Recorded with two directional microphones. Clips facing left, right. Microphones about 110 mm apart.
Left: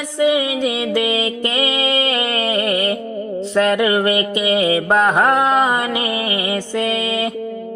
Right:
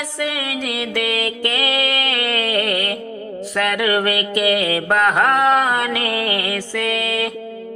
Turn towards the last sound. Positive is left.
turn(degrees=20)  # may be behind; listen again after turning